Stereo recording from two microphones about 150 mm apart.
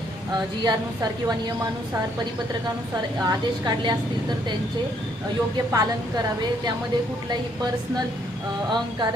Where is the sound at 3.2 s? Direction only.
30° right (ahead or behind).